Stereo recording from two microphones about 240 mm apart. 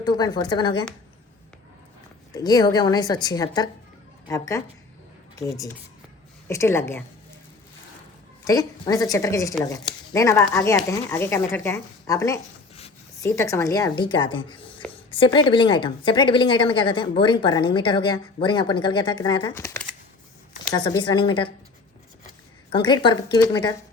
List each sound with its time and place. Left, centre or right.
0.0 s speech: centre
2.3 s speech: centre
8.4 s a woman's voice: centre
22.7 s a woman's voice: centre